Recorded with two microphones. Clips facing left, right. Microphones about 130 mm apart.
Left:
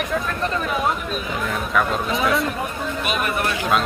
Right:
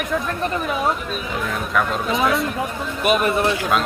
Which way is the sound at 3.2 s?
25° right (ahead or behind).